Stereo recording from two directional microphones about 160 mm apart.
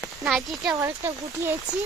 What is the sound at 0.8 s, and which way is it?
Speech, 15° right (ahead or behind).